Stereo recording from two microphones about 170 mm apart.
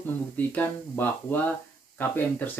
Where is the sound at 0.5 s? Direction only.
10° left (ahead or behind).